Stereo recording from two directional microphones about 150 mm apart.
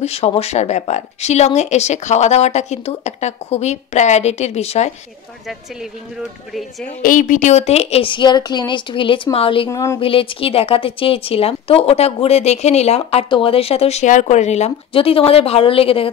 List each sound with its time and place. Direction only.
0.0 s speech: 45° left (ahead or behind)
7.0 s speech: 60° left (ahead or behind); by 9.7 s 35° left (ahead or behind)
9.7 s speech: 20° left (ahead or behind)
9.9 s speech: 35° left (ahead or behind)